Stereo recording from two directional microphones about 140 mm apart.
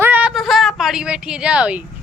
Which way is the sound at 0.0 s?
10° right (ahead or behind).